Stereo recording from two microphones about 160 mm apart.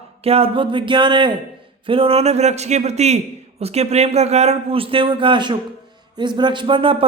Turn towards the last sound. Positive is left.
turn(degrees=-35)  # may be behind; listen again after turning